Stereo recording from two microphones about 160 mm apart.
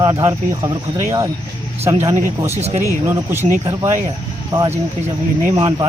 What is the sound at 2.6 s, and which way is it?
Speech, 40° right (ahead or behind).